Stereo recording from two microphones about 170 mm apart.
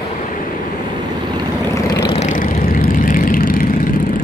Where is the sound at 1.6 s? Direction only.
15° left (ahead or behind).